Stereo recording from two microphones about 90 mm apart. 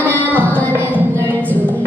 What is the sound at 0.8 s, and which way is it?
Music, 20° right (ahead or behind).